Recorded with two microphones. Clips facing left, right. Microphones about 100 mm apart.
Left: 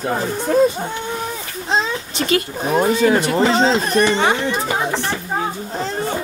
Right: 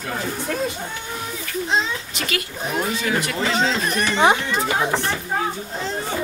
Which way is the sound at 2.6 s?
40° left (ahead or behind).